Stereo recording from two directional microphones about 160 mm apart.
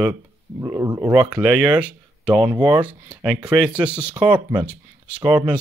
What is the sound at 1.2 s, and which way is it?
Speech, 5° right (ahead or behind).